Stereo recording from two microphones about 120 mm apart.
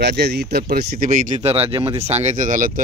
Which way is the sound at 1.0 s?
90° right.